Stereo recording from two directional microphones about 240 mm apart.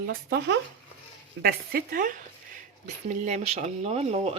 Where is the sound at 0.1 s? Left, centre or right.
Right.